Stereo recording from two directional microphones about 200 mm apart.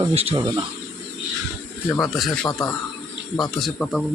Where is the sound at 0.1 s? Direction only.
30° right (ahead or behind).